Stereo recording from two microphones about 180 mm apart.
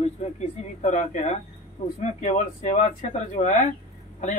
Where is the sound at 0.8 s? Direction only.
40° left (ahead or behind).